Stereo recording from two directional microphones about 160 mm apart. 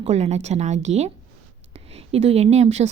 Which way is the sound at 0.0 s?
45° right (ahead or behind).